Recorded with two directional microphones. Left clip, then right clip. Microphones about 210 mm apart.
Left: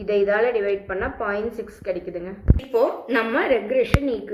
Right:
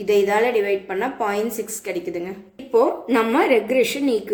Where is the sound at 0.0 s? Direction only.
55° right (ahead or behind).